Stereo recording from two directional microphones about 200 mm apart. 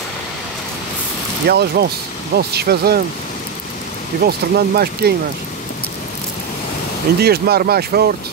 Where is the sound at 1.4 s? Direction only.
50° right (ahead or behind).